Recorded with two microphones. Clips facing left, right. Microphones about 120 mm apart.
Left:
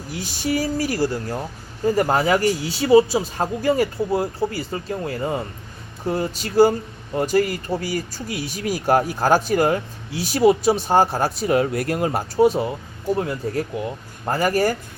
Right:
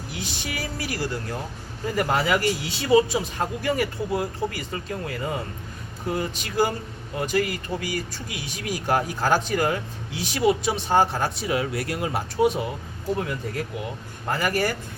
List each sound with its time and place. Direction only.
0.1 s speech: 40° left (ahead or behind)